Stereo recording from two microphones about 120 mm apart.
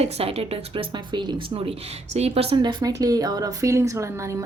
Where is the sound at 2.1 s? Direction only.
60° right (ahead or behind).